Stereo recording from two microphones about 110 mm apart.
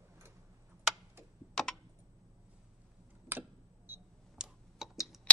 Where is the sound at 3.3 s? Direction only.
20° right (ahead or behind).